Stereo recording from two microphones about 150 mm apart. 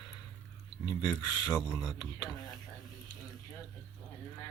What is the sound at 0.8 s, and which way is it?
Speech, 20° left (ahead or behind).